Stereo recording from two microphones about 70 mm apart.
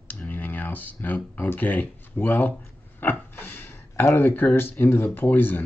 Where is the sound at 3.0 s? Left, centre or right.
Left.